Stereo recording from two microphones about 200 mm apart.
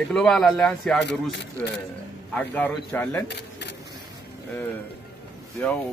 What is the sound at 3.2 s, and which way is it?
Camera, 60° left (ahead or behind).